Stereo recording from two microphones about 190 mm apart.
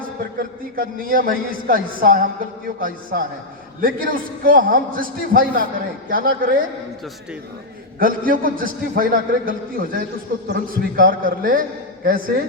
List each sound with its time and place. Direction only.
0.8 s a woman's voice: 50° right (ahead or behind)
7.9 s a woman's voice: 50° right (ahead or behind)